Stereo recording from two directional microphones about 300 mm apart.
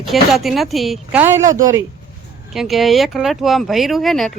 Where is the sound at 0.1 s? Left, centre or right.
Centre.